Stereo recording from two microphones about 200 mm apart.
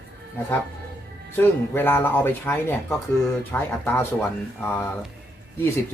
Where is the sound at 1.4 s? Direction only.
10° left (ahead or behind).